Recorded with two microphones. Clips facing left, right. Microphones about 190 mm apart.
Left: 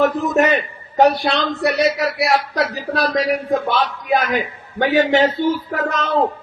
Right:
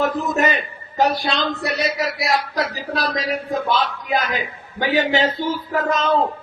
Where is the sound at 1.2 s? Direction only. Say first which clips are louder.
Left 4 dB; 65° left (ahead or behind).